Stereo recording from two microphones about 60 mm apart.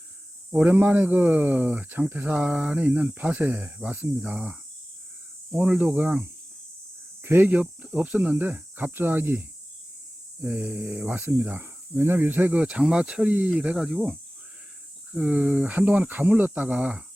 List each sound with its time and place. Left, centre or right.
0.6 s speech: right
7.5 s speech: right
10.4 s speech: right
13.8 s speech: centre
15.2 s speech: right